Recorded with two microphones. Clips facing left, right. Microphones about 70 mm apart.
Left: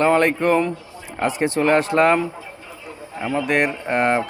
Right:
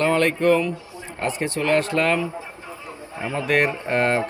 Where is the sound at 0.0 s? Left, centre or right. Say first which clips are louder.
Left 2 dB; centre.